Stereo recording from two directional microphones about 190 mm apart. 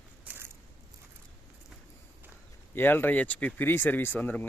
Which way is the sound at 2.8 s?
10° left (ahead or behind).